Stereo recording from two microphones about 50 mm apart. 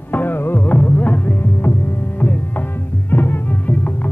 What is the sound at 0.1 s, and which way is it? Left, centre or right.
Music, left.